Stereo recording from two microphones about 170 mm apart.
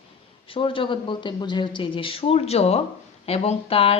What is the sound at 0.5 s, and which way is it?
A woman's voice, 30° left (ahead or behind).